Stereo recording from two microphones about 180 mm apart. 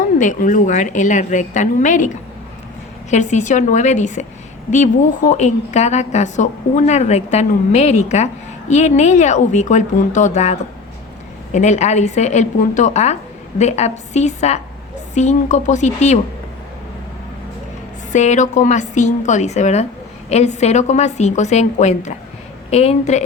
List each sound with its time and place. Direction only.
0.2 s a woman's voice: 45° left (ahead or behind)
18.1 s a woman's voice: 40° left (ahead or behind)